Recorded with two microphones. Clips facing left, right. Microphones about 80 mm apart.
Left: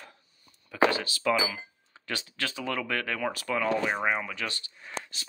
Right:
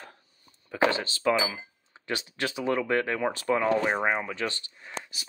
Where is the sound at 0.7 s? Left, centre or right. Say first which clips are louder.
Even; right.